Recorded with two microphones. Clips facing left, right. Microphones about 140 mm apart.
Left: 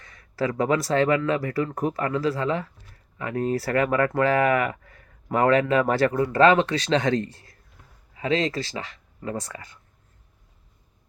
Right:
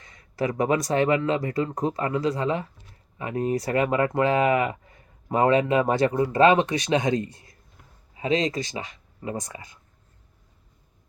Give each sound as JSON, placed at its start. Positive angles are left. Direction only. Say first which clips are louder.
{"t": 0.0, "sound": "speech", "louder": "left 1 dB", "side_deg": -20}